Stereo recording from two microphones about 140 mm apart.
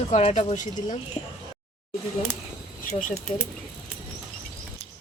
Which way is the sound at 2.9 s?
70° left (ahead or behind).